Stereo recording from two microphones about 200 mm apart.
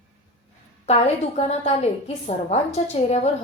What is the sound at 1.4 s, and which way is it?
A woman's voice, 35° left (ahead or behind).